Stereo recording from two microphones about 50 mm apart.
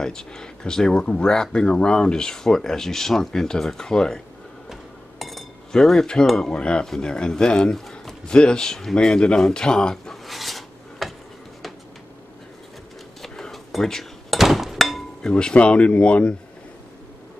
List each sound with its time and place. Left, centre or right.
0.0 s speech: centre
5.7 s speech: centre
10.2 s filing: centre
13.2 s door: centre
14.4 s a sound: centre
15.2 s speech: centre